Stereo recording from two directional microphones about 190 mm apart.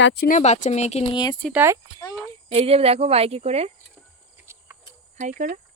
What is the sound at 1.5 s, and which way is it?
Speech, 10° right (ahead or behind).